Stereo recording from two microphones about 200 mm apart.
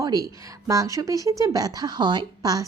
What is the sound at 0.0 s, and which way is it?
Speech, 20° right (ahead or behind).